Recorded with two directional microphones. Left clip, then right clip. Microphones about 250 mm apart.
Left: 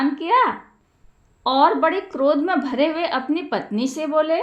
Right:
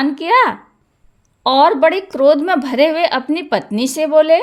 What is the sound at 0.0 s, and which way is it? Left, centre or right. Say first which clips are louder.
A woman's voice: right 5 dB; right.